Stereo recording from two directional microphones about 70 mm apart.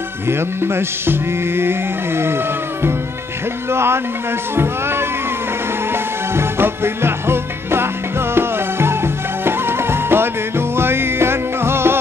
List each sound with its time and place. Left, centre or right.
0.3 s music: right
3.7 s music: right
6.3 s music: right